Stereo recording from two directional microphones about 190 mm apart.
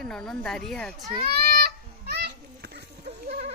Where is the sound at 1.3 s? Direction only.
55° right (ahead or behind).